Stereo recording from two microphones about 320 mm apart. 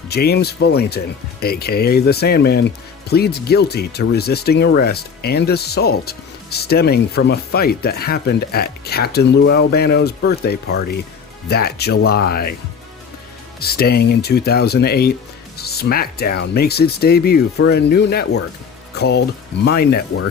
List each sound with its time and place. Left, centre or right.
0.1 s speech: left
13.6 s speech: left